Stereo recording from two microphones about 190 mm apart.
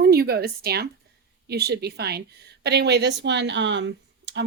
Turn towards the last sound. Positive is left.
turn(degrees=-70)  # may be behind; listen again after turning